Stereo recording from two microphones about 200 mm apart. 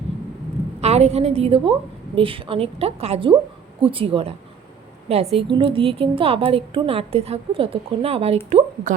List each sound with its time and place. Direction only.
0.8 s a woman's voice: 30° right (ahead or behind)